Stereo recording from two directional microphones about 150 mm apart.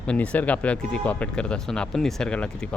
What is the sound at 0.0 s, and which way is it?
Speech, 10° left (ahead or behind).